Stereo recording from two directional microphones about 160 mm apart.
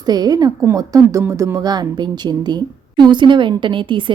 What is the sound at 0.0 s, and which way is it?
A woman's voice, 25° right (ahead or behind).